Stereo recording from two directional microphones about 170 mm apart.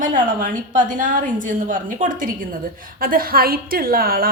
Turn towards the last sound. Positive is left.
turn(degrees=-60)  # may be behind; listen again after turning